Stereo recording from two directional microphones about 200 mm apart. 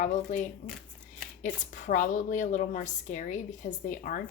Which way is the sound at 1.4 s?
40° left (ahead or behind).